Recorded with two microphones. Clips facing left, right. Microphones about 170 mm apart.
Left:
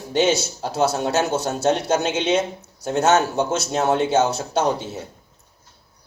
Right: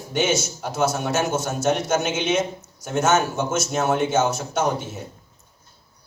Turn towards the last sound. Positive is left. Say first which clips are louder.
# left 2 dB
turn(degrees=30)  # may be behind; listen again after turning